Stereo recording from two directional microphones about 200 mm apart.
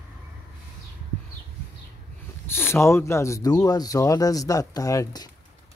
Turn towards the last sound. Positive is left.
turn(degrees=20)  # may be behind; listen again after turning